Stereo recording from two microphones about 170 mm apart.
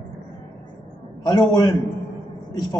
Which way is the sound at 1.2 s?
25° left (ahead or behind).